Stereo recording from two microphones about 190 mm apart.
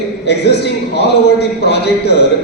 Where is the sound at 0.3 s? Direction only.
60° left (ahead or behind).